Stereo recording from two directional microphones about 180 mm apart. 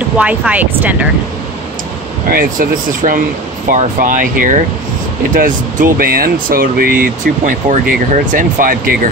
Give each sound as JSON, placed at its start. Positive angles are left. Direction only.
{"t": 0.2, "sound": "speech", "side_deg": -10}
{"t": 2.3, "sound": "speech", "side_deg": -50}